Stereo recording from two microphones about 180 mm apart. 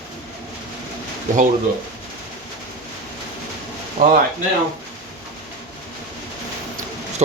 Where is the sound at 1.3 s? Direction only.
45° right (ahead or behind).